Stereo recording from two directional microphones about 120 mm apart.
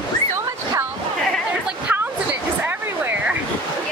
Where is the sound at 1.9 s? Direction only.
15° right (ahead or behind).